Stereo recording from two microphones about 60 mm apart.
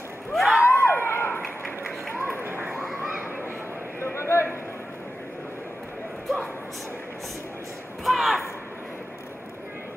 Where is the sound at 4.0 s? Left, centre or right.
Left.